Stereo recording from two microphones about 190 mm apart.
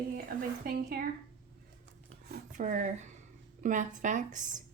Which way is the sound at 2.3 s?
45° right (ahead or behind).